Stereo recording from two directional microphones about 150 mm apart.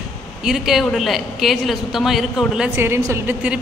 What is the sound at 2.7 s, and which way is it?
Speech, 15° right (ahead or behind).